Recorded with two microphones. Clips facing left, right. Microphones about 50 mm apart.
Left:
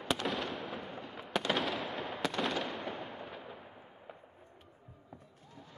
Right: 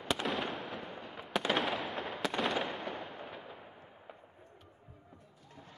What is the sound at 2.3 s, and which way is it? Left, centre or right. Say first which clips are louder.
Fireworks: right 4 dB; centre.